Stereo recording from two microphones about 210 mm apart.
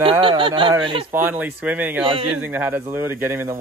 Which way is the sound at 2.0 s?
25° right (ahead or behind).